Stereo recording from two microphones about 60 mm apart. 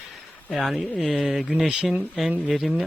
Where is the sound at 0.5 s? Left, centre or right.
Centre.